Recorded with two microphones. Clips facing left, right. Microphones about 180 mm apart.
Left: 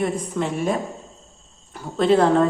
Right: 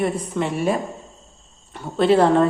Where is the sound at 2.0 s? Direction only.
5° right (ahead or behind).